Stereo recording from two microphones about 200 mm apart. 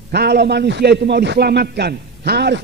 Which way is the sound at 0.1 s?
55° right (ahead or behind).